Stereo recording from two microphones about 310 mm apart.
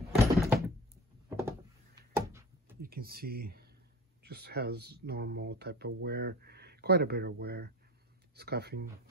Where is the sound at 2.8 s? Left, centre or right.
Right.